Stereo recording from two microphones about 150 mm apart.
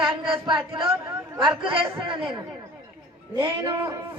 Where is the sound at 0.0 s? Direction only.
35° right (ahead or behind).